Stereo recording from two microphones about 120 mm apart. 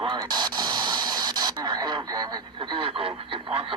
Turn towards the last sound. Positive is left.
turn(degrees=-50)  # may be behind; listen again after turning